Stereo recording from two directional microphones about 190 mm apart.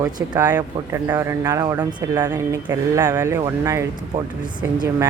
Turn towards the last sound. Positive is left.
turn(degrees=-20)  # may be behind; listen again after turning